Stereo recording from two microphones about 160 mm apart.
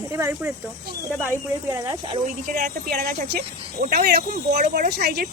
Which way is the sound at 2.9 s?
90° right.